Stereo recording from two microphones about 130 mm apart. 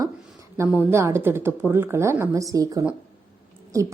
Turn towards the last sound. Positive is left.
turn(degrees=-25)  # may be behind; listen again after turning